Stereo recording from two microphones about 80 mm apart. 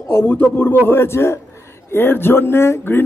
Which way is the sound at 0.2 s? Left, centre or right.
Left.